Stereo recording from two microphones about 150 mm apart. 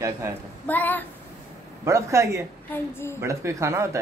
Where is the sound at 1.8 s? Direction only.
20° right (ahead or behind).